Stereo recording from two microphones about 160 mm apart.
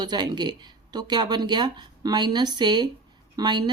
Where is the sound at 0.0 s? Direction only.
25° right (ahead or behind).